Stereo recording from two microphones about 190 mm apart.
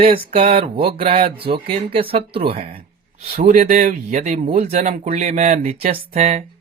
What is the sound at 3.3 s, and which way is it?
Speech, 40° right (ahead or behind).